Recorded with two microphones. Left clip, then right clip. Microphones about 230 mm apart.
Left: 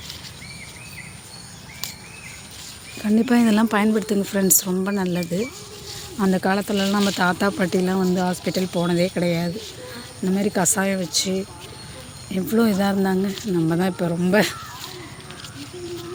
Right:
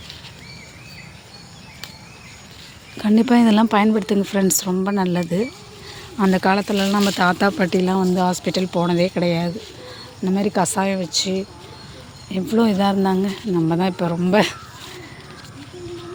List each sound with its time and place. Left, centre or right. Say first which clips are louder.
3.0 s speech: right 3 dB; centre